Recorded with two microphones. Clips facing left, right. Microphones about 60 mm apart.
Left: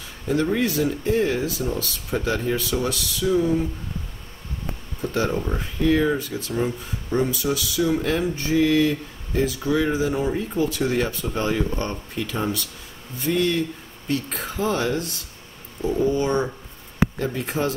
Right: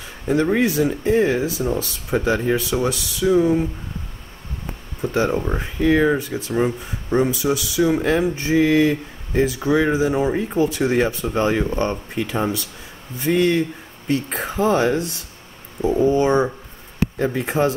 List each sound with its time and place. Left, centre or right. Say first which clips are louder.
0.3 s speech: right 4 dB; right
5.0 s speech: right 4 dB; right